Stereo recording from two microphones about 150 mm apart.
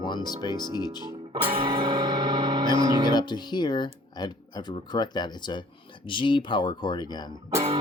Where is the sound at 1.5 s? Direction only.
35° right (ahead or behind).